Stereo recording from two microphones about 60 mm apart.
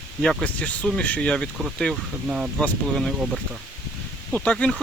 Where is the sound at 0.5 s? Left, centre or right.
Left.